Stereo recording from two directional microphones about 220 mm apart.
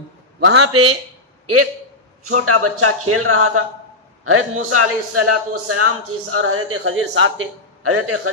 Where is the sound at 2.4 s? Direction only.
85° right.